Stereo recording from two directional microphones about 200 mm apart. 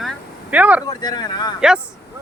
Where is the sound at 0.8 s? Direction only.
20° left (ahead or behind).